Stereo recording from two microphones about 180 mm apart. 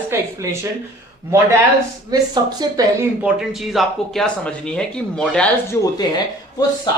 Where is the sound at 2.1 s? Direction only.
20° right (ahead or behind).